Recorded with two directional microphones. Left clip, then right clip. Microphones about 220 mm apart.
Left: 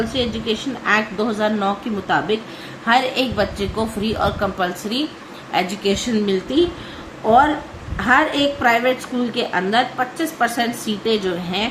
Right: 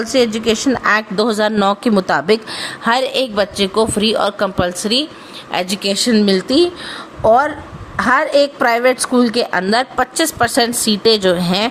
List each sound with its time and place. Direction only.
0.1 s a woman's voice: 50° right (ahead or behind)
7.9 s a woman's voice: 50° right (ahead or behind)